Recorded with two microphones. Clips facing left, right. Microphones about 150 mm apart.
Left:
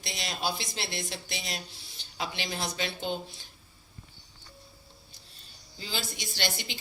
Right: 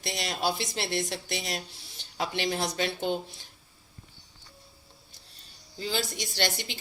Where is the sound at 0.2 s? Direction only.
60° right (ahead or behind).